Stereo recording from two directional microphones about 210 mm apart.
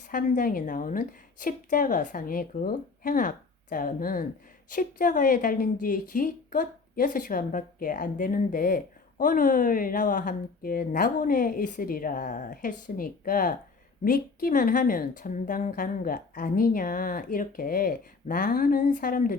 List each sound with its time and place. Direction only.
0.1 s a woman's voice: 40° left (ahead or behind)